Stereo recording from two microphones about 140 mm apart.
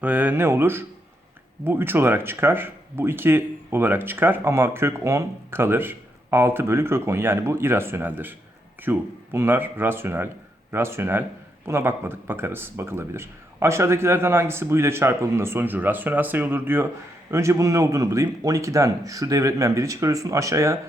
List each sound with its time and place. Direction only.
0.0 s speech: 10° right (ahead or behind)